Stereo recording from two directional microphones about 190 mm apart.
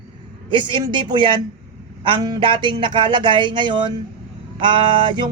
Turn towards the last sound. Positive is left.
turn(degrees=-25)  # may be behind; listen again after turning